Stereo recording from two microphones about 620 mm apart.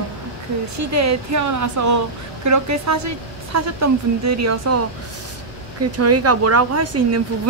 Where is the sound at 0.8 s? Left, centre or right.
Right.